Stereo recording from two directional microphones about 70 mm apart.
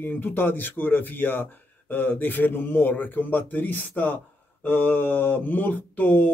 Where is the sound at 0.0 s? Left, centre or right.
Left.